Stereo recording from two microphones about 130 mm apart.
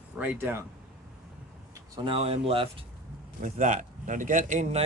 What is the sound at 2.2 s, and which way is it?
Speech, 50° right (ahead or behind).